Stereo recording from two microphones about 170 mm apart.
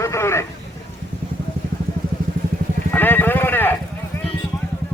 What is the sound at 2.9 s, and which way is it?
Speech, 10° left (ahead or behind).